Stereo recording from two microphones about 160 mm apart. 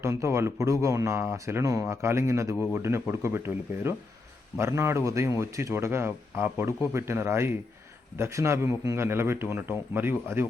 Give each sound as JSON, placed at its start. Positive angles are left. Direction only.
{"t": 0.0, "sound": "speech", "side_deg": -15}